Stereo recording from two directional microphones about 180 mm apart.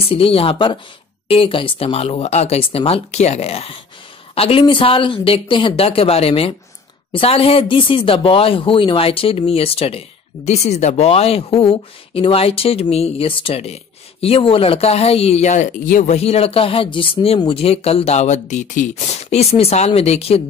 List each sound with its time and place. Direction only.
0.1 s speech: 30° left (ahead or behind)